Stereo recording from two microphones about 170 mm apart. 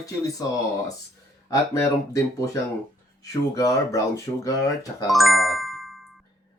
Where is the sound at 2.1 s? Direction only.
15° left (ahead or behind).